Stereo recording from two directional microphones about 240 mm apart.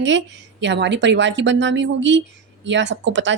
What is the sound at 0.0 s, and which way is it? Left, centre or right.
Speech, right.